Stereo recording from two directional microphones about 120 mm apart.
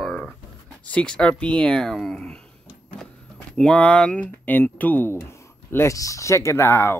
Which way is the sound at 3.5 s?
10° left (ahead or behind).